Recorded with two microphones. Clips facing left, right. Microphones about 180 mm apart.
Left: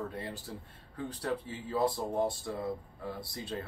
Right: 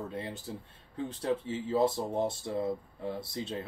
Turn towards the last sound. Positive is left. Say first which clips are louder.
# right 3 dB
turn(degrees=-20)  # may be behind; listen again after turning